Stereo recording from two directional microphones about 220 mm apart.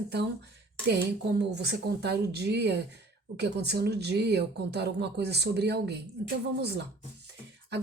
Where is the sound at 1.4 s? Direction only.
50° right (ahead or behind).